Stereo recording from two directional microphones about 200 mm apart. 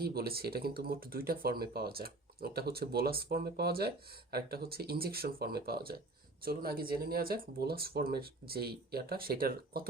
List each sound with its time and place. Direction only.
0.0 s speech: 50° right (ahead or behind)